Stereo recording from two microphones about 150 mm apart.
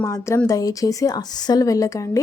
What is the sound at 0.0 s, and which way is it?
A woman's voice, 20° left (ahead or behind).